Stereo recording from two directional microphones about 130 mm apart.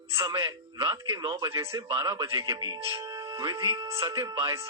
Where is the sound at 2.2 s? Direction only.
30° right (ahead or behind).